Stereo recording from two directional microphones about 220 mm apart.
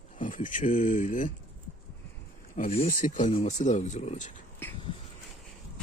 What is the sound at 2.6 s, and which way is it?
Speech, 35° left (ahead or behind).